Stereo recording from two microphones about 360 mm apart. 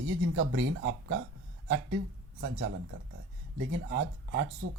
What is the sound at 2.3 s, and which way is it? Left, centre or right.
Speech, right.